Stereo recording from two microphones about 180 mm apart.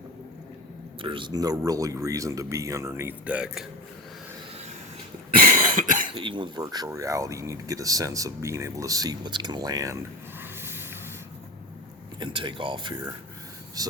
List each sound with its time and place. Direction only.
1.0 s a man's voice: 25° right (ahead or behind); by 3.7 s 5° right (ahead or behind)
5.3 s cough: 50° right (ahead or behind)
6.1 s speech: 25° right (ahead or behind)
10.4 s a sound: 10° right (ahead or behind)
12.2 s speech: 25° right (ahead or behind)